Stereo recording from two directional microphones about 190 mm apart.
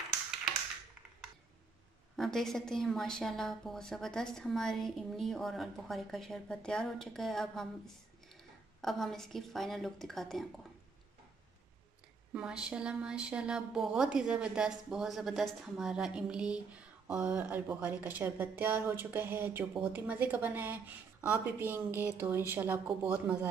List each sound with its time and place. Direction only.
2.1 s a woman's voice: centre (ahead or behind)
12.3 s a woman's voice: 5° right (ahead or behind)